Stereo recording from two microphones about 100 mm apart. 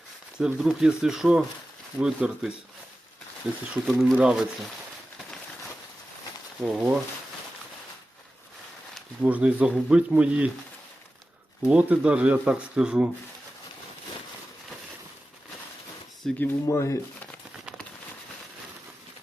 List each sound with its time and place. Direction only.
0.3 s speech: 5° right (ahead or behind)
6.6 s speech: 5° right (ahead or behind)
9.2 s speech: 15° right (ahead or behind)
11.6 s speech: 15° right (ahead or behind)
16.2 s speech: 5° left (ahead or behind)
16.6 s speech: 30° left (ahead or behind)